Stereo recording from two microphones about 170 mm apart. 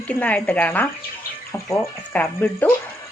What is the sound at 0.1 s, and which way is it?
Speech, 10° left (ahead or behind).